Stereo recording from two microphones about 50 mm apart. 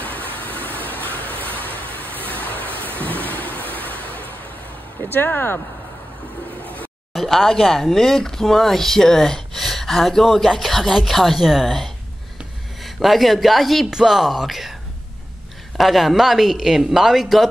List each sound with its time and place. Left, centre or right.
0.0 s a sound: left
2.0 s vehicle: left
3.5 s vehicle: left
5.0 s speech: left
7.2 s speech: centre
15.8 s speech: centre